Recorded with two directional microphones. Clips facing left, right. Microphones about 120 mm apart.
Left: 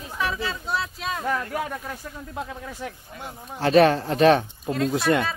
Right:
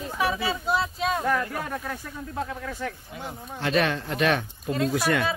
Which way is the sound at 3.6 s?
35° left (ahead or behind).